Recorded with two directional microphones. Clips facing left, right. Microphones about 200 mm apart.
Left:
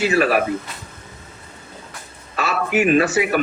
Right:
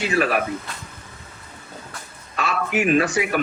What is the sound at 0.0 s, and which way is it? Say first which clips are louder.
Speech: left 4 dB; 5° left (ahead or behind).